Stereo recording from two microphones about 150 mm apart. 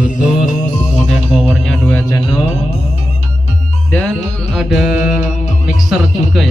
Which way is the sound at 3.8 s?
10° left (ahead or behind).